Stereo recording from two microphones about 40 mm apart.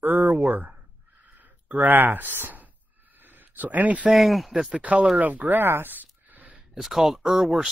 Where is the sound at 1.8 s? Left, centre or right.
Right.